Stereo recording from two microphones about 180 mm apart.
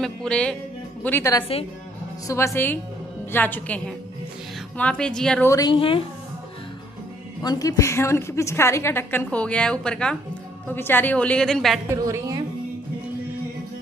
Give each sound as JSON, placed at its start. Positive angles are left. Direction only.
{"t": 0.0, "sound": "a woman's voice", "side_deg": 5}
{"t": 5.5, "sound": "a woman's voice", "side_deg": 25}
{"t": 7.4, "sound": "a woman's voice", "side_deg": 20}
{"t": 11.9, "sound": "a woman's voice", "side_deg": -15}